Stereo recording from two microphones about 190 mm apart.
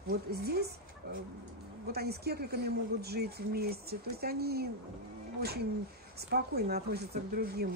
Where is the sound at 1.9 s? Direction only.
55° right (ahead or behind).